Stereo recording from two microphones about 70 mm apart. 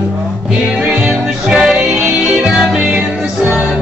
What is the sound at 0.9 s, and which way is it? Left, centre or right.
Music, centre.